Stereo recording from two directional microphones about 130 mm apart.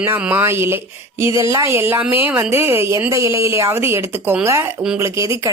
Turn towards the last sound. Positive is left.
turn(degrees=-20)  # may be behind; listen again after turning